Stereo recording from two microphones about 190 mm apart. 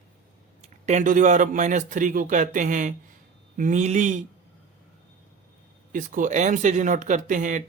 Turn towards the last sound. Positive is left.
turn(degrees=-45)  # may be behind; listen again after turning